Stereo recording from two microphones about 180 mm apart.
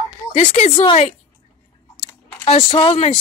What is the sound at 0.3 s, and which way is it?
Speech, 40° left (ahead or behind).